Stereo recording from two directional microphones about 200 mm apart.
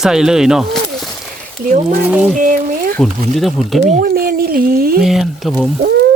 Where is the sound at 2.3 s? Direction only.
40° right (ahead or behind).